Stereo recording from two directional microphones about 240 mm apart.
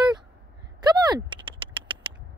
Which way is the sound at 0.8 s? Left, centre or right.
Centre.